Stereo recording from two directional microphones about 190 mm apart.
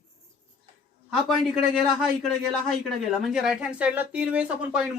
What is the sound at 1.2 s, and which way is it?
A man's voice, centre (ahead or behind).